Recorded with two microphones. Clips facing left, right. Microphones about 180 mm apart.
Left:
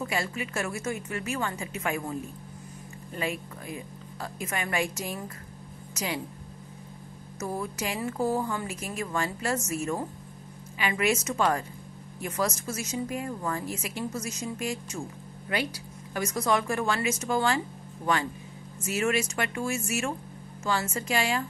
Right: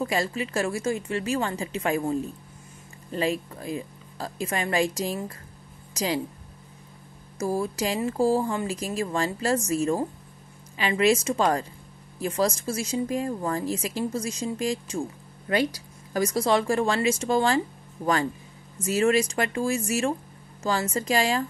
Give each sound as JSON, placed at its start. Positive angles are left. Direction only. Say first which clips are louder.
{"t": 0.0, "sound": "speech", "louder": "right 5 dB", "side_deg": -35}
{"t": 7.3, "sound": "speech", "louder": "right 6 dB", "side_deg": -30}
{"t": 10.8, "sound": "speech", "louder": "right 5 dB", "side_deg": -30}
{"t": 18.8, "sound": "speech", "louder": "right 6 dB", "side_deg": -35}